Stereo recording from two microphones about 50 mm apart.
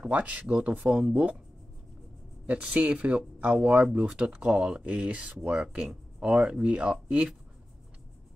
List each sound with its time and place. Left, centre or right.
0.0 s speech: right
2.4 s speech: right